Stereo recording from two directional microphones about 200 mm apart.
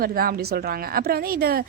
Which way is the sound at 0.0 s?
45° right (ahead or behind).